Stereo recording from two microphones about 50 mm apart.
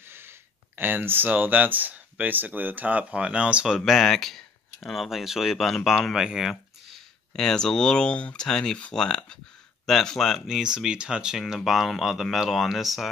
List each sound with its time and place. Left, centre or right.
0.0 s speech: right
3.6 s speech: centre
4.1 s speech: centre
7.3 s speech: centre
8.5 s speech: centre
10.5 s speech: centre
11.3 s speech: centre